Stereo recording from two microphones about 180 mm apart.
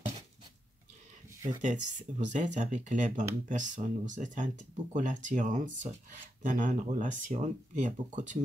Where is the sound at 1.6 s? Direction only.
40° right (ahead or behind).